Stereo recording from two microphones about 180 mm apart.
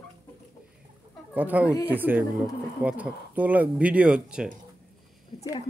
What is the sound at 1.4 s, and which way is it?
Speech, 10° right (ahead or behind).